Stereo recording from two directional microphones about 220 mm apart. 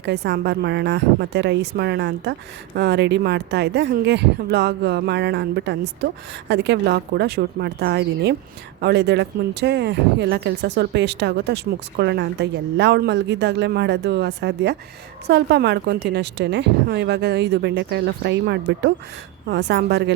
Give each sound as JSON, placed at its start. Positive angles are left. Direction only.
{"t": 0.0, "sound": "speech", "side_deg": -50}